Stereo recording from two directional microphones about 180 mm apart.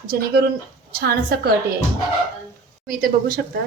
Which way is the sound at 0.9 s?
60° right (ahead or behind).